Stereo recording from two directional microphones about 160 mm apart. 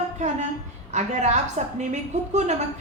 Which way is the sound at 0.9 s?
45° right (ahead or behind).